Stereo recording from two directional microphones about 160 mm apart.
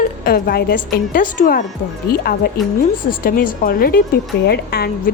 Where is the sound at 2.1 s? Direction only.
70° left (ahead or behind).